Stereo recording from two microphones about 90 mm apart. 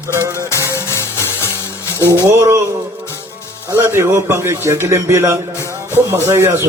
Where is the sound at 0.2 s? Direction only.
35° right (ahead or behind).